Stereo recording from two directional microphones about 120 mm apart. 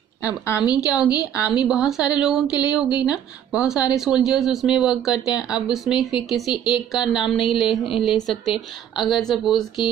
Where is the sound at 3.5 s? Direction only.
5° right (ahead or behind).